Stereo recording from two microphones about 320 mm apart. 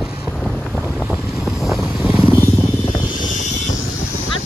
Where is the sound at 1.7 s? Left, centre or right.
Centre.